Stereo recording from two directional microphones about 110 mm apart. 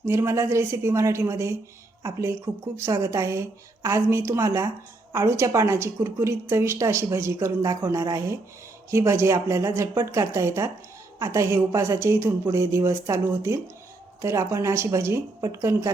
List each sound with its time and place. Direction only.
0.0 s speech: 25° right (ahead or behind)